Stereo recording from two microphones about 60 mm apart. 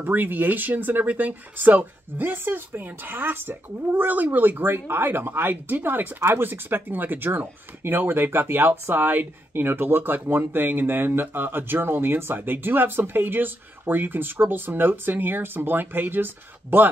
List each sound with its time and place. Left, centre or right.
0.0 s speech: right